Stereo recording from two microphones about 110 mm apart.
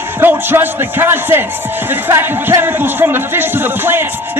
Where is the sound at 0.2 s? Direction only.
20° right (ahead or behind).